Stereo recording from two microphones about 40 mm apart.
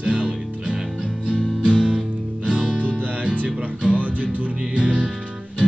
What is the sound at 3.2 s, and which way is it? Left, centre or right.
Music, right.